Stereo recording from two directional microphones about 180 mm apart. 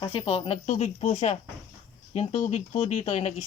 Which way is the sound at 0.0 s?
30° left (ahead or behind).